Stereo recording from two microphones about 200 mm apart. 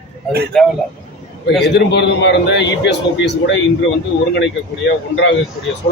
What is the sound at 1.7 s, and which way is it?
A man's voice, 60° left (ahead or behind).